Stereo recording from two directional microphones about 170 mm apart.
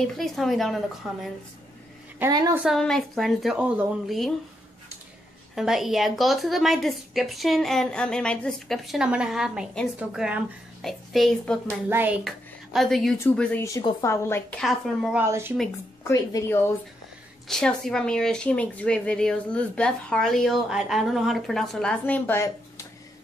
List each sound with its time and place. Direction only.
0.2 s a woman's voice: centre (ahead or behind)
2.1 s a woman's voice: 20° right (ahead or behind)
2.6 s a woman's voice: centre (ahead or behind)
5.5 s a woman's voice: centre (ahead or behind)
11.9 s a woman's voice: 10° right (ahead or behind)
12.3 s a woman's voice: centre (ahead or behind)
14.6 s a woman's voice: centre (ahead or behind)
15.2 s a woman's voice: 15° right (ahead or behind)
16.0 s a woman's voice: 20° left (ahead or behind)
17.5 s a woman's voice: 5° left (ahead or behind)